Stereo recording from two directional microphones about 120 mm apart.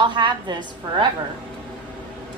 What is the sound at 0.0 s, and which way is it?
Speech, 40° right (ahead or behind).